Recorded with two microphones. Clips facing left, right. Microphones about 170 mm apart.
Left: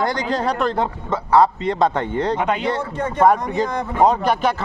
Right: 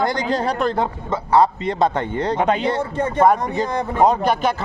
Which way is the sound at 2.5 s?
30° right (ahead or behind).